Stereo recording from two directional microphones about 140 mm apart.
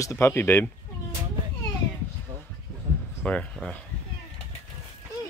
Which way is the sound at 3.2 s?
10° left (ahead or behind).